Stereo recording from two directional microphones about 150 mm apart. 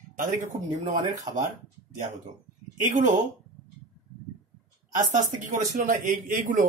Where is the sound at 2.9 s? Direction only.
55° right (ahead or behind).